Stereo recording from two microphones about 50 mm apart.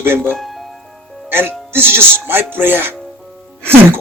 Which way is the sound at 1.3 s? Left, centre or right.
Right.